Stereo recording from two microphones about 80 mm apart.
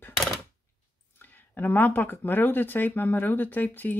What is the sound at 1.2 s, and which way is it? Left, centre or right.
Speech, left.